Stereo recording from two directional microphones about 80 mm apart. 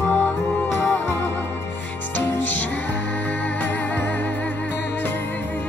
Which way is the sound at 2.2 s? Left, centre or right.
Left.